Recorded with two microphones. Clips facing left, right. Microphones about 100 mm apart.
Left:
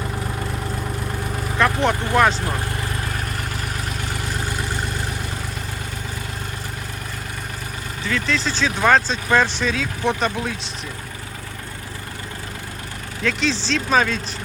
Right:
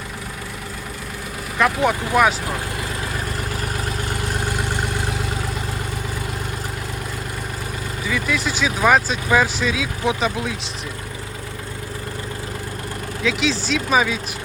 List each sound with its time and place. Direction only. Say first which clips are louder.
1.5 s speech: right 1 dB; 5° right (ahead or behind)
8.0 s speech: even; 10° right (ahead or behind)
13.2 s speech: right 1 dB; centre (ahead or behind)